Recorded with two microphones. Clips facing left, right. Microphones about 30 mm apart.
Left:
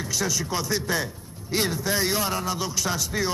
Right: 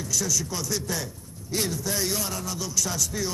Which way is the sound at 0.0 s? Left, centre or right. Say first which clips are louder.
Left 1 dB; left.